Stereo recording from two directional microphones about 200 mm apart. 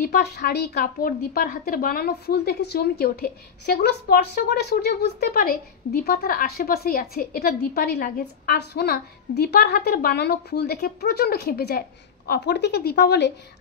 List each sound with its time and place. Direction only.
0.0 s a woman's voice: 55° left (ahead or behind)